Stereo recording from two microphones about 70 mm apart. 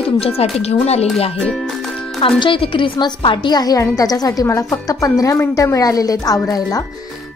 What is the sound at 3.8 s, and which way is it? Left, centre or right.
A woman's voice, left.